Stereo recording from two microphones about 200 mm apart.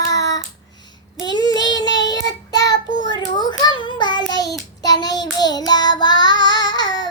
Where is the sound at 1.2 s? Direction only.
20° left (ahead or behind).